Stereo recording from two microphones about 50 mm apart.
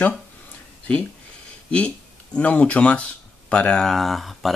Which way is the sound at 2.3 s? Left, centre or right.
Left.